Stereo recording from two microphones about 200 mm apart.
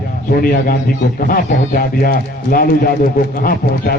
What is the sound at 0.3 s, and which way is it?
A man's voice, 45° left (ahead or behind).